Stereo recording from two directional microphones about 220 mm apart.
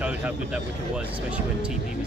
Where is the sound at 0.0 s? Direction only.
5° right (ahead or behind).